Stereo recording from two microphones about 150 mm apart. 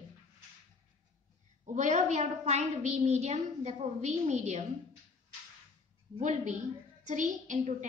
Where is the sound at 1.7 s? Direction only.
50° right (ahead or behind).